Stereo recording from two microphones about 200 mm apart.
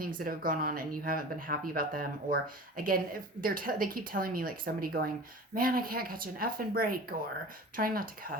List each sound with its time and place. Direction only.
0.2 s speech: 45° right (ahead or behind)